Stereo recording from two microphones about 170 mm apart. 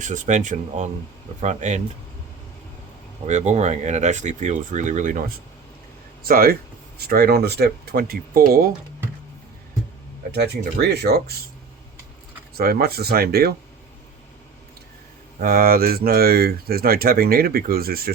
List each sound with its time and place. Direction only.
0.0 s speech: 45° right (ahead or behind)
3.2 s speech: 40° right (ahead or behind)
6.2 s speech: 60° right (ahead or behind)
10.3 s speech: 75° right (ahead or behind)
12.5 s speech: 65° right (ahead or behind)
15.4 s speech: 55° right (ahead or behind)